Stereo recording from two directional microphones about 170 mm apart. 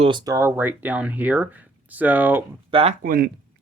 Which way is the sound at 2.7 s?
35° right (ahead or behind).